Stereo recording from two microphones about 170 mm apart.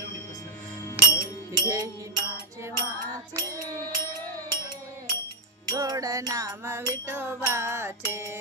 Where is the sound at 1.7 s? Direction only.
20° right (ahead or behind).